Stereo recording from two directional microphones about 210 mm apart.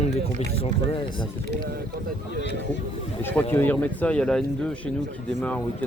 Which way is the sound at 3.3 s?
10° left (ahead or behind).